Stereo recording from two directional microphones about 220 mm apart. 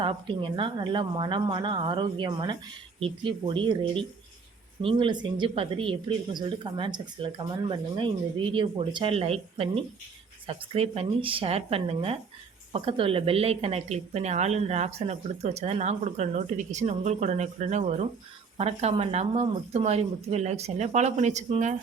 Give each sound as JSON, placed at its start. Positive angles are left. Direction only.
{"t": 0.0, "sound": "a woman's voice", "side_deg": -25}